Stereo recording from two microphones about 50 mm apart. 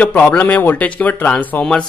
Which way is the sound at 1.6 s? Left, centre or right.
Centre.